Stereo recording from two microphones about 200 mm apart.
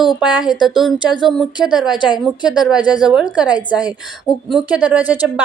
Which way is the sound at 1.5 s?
20° left (ahead or behind).